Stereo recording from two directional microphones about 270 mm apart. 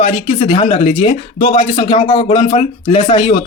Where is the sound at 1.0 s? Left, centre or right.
Left.